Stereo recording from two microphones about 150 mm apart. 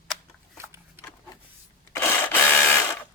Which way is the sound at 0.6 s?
15° right (ahead or behind).